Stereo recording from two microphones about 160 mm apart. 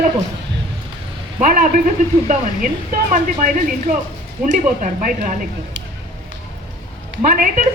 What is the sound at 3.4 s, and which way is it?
A woman's voice, 55° right (ahead or behind).